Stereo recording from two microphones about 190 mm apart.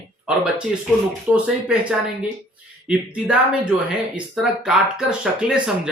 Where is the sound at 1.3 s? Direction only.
5° right (ahead or behind).